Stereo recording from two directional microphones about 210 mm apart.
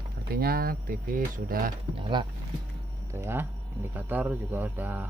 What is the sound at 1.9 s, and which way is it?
Speech, 25° right (ahead or behind).